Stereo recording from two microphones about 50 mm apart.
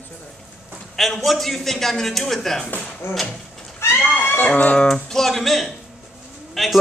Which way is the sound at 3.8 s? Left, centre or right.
Left.